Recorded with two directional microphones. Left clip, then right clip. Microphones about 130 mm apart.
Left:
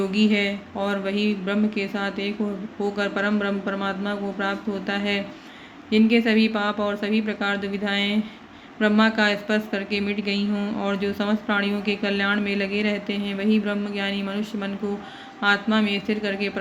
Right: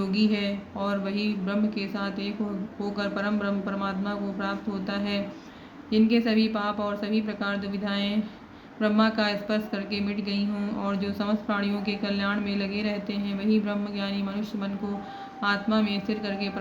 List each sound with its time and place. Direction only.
0.0 s speech: 40° left (ahead or behind)